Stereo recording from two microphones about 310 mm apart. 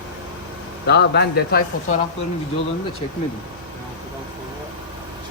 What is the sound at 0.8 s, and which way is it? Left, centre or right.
Speech, left.